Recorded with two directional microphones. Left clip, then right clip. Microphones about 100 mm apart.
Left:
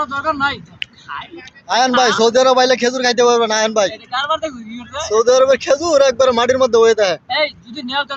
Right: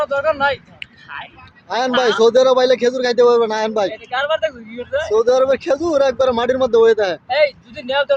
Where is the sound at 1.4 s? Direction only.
10° right (ahead or behind).